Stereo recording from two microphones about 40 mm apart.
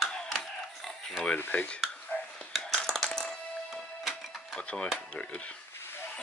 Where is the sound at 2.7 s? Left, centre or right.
Centre.